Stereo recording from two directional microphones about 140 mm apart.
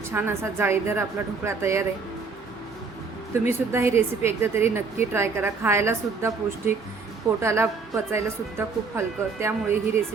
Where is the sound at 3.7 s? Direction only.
15° right (ahead or behind).